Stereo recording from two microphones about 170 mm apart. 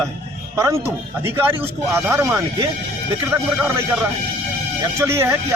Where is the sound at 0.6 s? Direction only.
15° right (ahead or behind).